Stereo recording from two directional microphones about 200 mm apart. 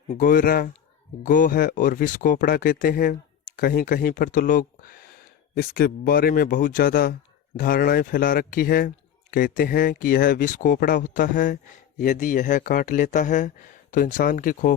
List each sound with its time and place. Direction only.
0.1 s speech: 40° left (ahead or behind)